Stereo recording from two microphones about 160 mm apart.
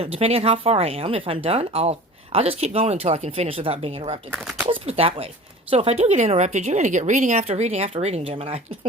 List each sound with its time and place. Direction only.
0.0 s speech: 40° right (ahead or behind)
4.3 s speech: 5° right (ahead or behind)
4.6 s a woman's voice: 35° right (ahead or behind)